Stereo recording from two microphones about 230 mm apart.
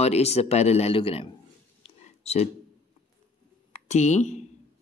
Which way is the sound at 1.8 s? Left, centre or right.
Left.